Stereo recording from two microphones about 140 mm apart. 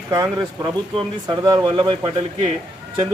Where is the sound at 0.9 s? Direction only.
30° right (ahead or behind).